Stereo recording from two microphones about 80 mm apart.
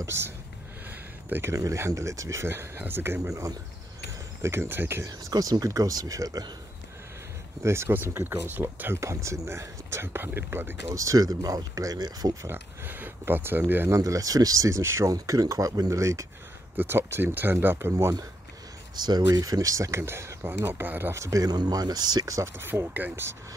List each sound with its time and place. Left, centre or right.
1.5 s speech: right
5.0 s speech: right
7.6 s speech: right
12.4 s speech: right
13.8 s speech: right
15.0 s speech: right
16.7 s speech: right
18.9 s speech: right
20.0 s speech: right
21.1 s speech: right
22.6 s speech: right